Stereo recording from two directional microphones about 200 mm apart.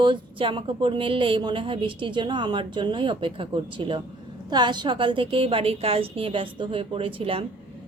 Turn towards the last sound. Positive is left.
turn(degrees=-25)  # may be behind; listen again after turning